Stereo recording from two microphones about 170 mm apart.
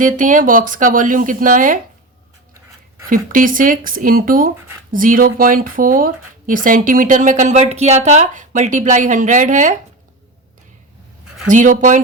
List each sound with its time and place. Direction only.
0.0 s speech: 50° right (ahead or behind)
3.1 s speech: 55° right (ahead or behind)
11.4 s speech: 50° right (ahead or behind)